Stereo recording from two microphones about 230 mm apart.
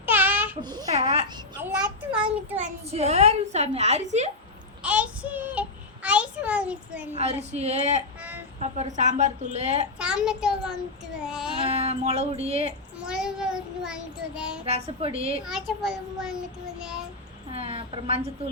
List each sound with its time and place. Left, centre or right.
0.0 s babbling: centre
0.6 s a woman's voice: centre
1.6 s child singing: centre
2.9 s a woman's voice: right
4.8 s a child's voice: centre
7.1 s a woman's voice: right
10.0 s child singing: centre
11.6 s a sound: right
13.1 s child singing: centre
14.6 s a woman's voice: right
15.4 s child singing: centre
17.5 s a woman's voice: right